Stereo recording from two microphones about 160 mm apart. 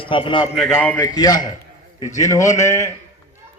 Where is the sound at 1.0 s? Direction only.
25° left (ahead or behind).